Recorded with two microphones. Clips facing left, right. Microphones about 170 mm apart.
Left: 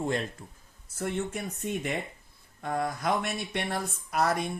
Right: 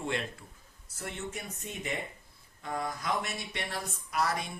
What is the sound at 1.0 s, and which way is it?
Speech, 55° left (ahead or behind).